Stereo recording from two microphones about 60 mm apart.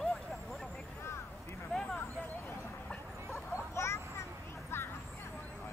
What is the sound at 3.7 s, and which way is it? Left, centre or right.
Vehicle, left.